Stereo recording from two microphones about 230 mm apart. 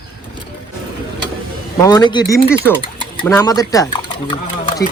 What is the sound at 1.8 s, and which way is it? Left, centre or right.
Speech, centre.